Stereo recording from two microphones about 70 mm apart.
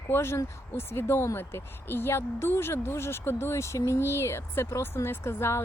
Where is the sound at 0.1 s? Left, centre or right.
Left.